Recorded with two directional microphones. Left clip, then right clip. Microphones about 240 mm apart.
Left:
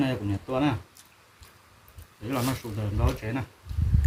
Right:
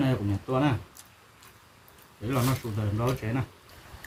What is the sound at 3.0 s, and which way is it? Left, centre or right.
Speech, centre.